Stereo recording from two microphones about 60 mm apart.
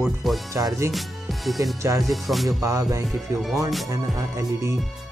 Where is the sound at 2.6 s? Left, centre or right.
Right.